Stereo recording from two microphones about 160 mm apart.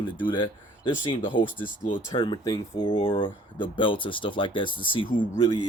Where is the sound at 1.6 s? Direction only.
55° left (ahead or behind).